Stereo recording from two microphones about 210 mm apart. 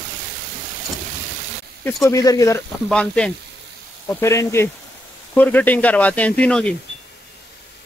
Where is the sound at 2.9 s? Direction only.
5° left (ahead or behind).